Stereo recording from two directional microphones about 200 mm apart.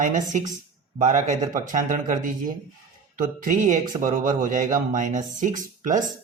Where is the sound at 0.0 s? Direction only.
40° right (ahead or behind).